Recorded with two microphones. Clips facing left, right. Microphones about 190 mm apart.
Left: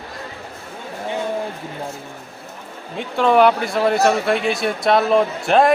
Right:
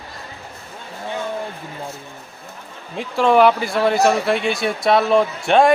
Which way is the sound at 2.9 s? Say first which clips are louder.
Even; centre (ahead or behind).